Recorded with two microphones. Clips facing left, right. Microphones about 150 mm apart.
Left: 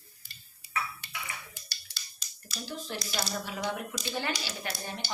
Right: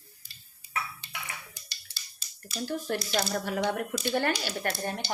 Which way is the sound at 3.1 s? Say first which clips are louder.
Right 5 dB; 60° right (ahead or behind).